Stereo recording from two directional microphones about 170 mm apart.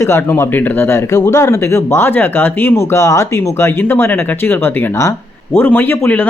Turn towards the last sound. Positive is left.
turn(degrees=10)  # may be behind; listen again after turning